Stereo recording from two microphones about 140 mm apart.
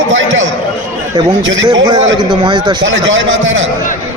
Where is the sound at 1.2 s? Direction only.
30° right (ahead or behind).